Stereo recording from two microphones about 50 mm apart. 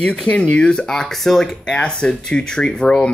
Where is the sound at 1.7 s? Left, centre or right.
Left.